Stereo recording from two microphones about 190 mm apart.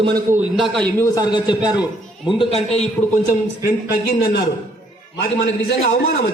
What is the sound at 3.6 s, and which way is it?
Speech, 55° left (ahead or behind).